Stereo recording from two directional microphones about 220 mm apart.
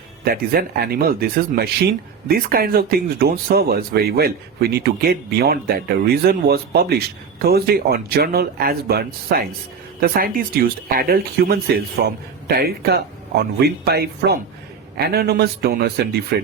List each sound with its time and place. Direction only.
0.3 s speech: 45° right (ahead or behind)